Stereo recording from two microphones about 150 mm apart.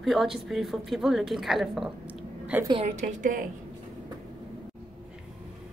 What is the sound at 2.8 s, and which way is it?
Speech, 60° right (ahead or behind).